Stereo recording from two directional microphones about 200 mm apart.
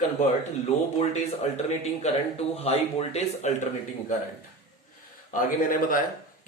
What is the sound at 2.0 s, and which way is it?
Speech, 30° left (ahead or behind).